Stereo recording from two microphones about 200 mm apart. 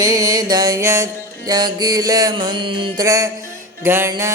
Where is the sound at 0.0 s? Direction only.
15° right (ahead or behind).